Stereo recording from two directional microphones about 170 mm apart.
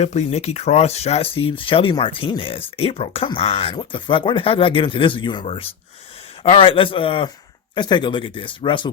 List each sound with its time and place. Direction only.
0.0 s speech: 40° left (ahead or behind)